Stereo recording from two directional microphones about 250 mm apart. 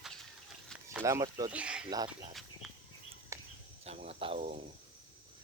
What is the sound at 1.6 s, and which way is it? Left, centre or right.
Speech, centre.